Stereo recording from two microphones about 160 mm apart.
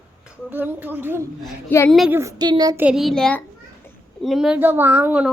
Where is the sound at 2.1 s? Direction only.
20° right (ahead or behind).